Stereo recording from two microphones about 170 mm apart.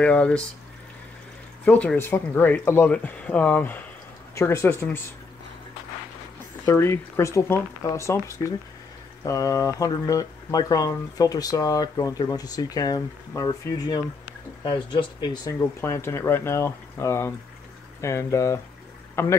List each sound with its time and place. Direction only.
0.0 s speech: 5° left (ahead or behind)
1.6 s speech: 10° left (ahead or behind)
6.6 s speech: 15° left (ahead or behind)